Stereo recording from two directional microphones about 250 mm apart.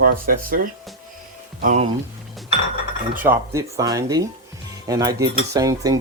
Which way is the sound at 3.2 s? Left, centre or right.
Centre.